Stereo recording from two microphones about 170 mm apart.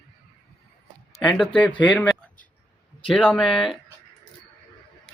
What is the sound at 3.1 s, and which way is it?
Speech, centre (ahead or behind).